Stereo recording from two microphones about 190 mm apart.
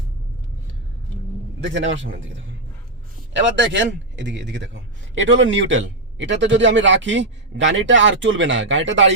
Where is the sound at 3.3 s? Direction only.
70° right (ahead or behind).